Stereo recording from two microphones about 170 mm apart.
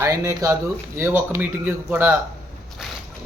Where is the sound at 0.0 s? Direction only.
15° right (ahead or behind).